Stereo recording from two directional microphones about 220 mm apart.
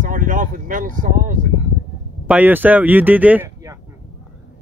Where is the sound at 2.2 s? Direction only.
10° right (ahead or behind).